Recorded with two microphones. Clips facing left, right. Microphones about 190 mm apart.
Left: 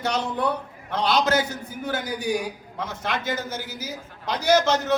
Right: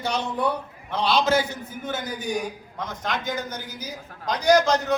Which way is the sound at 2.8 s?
5° left (ahead or behind).